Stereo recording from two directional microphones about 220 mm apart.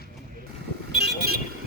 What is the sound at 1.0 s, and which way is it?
Vehicle, 45° right (ahead or behind).